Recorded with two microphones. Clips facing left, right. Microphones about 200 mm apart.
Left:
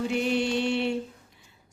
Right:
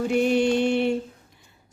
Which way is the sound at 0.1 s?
50° right (ahead or behind).